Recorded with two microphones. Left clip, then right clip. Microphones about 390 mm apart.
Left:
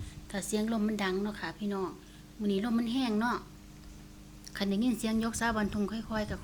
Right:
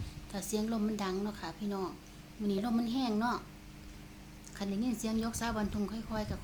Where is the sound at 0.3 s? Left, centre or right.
Centre.